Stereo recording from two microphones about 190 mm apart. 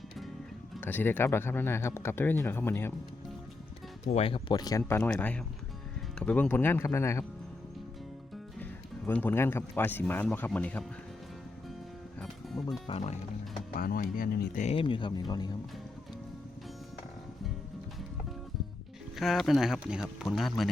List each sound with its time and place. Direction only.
0.8 s speech: 10° left (ahead or behind)
4.0 s speech: 30° left (ahead or behind)
4.8 s speech: 10° left (ahead or behind)
9.0 s speech: 10° left (ahead or behind)
12.2 s music: centre (ahead or behind)
12.9 s speech: 35° left (ahead or behind)
13.7 s speech: 50° left (ahead or behind); by 15.5 s 20° left (ahead or behind)
19.2 s speech: centre (ahead or behind)